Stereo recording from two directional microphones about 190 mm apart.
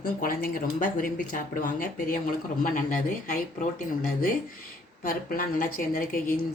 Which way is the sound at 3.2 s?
50° left (ahead or behind).